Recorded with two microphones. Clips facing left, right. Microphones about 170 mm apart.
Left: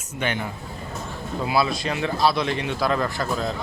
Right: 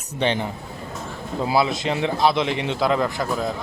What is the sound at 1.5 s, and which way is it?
Speech, 20° right (ahead or behind).